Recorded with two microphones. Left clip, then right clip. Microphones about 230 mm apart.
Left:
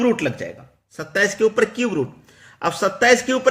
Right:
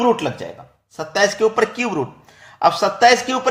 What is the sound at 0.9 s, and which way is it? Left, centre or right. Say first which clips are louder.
A man's voice: right 2 dB; left.